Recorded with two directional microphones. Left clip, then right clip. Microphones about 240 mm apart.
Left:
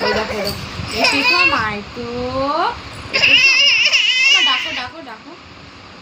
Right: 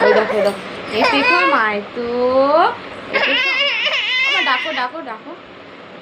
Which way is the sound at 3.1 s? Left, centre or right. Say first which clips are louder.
Left 5 dB; centre.